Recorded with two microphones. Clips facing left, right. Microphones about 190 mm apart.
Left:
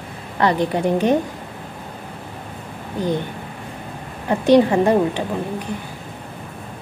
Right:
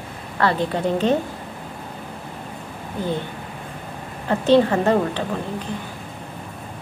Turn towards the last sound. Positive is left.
turn(degrees=15)  # may be behind; listen again after turning